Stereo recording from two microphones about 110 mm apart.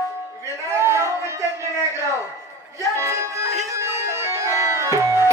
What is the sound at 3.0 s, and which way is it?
Music, 25° right (ahead or behind).